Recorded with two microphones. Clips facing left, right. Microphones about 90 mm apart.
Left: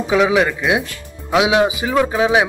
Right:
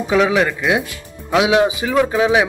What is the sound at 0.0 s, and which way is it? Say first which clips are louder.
Speech: even; 5° left (ahead or behind).